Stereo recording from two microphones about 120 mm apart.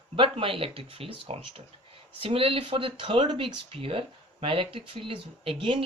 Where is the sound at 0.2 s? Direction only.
50° right (ahead or behind).